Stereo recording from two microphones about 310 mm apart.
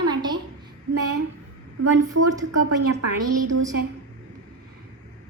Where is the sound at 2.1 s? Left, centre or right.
Right.